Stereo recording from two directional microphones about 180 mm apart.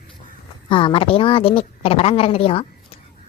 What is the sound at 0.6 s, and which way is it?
A woman's voice, 30° left (ahead or behind).